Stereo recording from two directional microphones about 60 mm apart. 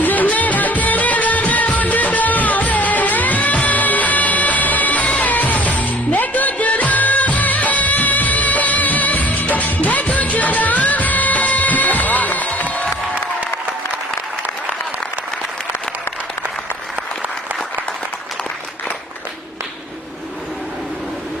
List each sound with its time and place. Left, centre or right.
0.0 s music: left